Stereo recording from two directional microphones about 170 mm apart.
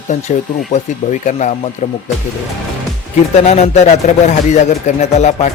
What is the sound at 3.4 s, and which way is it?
Speech, 40° left (ahead or behind).